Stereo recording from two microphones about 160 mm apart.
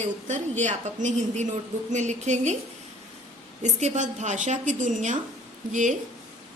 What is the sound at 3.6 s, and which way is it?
Speech, 50° right (ahead or behind).